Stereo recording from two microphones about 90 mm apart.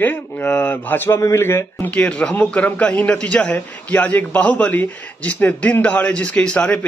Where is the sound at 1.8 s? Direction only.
15° left (ahead or behind).